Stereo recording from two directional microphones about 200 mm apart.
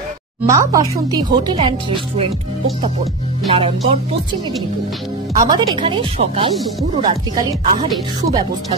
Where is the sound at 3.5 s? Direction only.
25° right (ahead or behind).